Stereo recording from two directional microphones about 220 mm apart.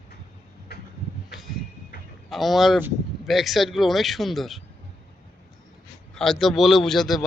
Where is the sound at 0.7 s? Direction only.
50° left (ahead or behind).